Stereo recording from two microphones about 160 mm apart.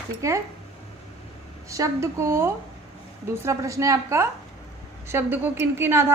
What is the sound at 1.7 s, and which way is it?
A woman's voice, 20° right (ahead or behind).